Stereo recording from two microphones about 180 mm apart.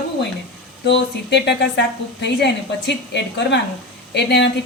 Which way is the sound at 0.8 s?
75° left (ahead or behind).